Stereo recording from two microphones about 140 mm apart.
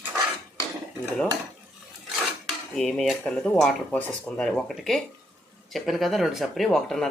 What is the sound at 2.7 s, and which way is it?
Speech, 5° left (ahead or behind).